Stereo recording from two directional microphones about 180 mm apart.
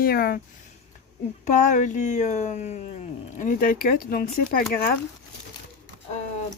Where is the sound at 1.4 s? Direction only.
45° left (ahead or behind).